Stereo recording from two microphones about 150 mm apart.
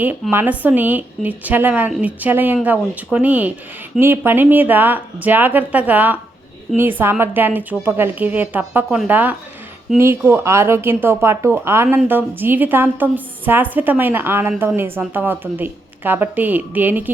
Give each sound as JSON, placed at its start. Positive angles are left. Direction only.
{"t": 0.0, "sound": "a woman's voice", "side_deg": -10}